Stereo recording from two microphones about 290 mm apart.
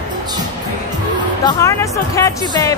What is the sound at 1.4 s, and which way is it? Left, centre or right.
Speech, centre.